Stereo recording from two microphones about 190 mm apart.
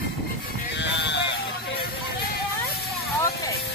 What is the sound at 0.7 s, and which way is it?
Speech, 70° left (ahead or behind).